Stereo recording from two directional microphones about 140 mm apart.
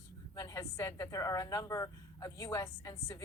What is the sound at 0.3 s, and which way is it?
A woman's voice, 25° left (ahead or behind).